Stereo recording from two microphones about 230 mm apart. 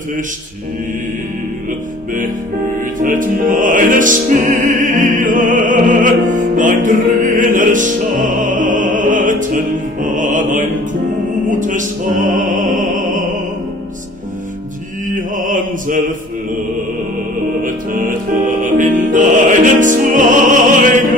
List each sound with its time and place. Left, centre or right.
3.0 s music: right
11.4 s opera: right
15.1 s music: right
17.6 s music: right